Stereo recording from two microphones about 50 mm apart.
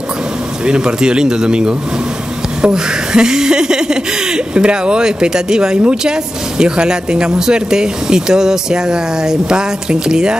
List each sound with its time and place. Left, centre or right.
0.7 s speech: centre